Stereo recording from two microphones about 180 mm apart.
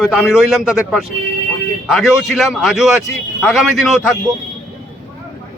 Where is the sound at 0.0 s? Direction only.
Centre (ahead or behind).